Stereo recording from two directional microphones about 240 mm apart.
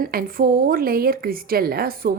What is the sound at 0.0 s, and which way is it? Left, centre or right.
A woman's voice, right.